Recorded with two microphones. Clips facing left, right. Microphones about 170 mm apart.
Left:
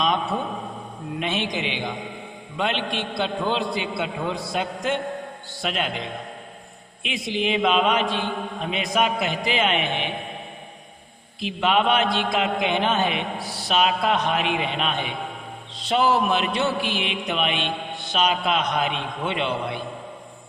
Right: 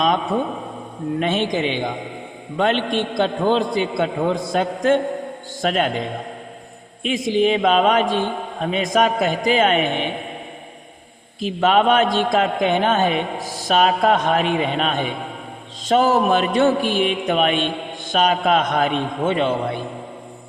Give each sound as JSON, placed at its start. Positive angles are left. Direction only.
{"t": 0.0, "sound": "a man's voice", "side_deg": -45}
{"t": 11.3, "sound": "a man's voice", "side_deg": -45}